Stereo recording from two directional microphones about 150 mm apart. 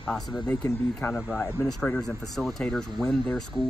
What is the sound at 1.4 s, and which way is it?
Speech, 15° left (ahead or behind).